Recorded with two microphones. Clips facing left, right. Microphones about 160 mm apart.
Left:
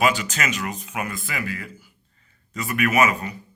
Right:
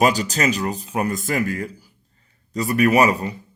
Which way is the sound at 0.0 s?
40° right (ahead or behind).